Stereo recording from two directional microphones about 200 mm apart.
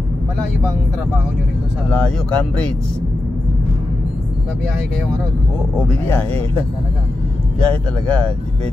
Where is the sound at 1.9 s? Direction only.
5° left (ahead or behind).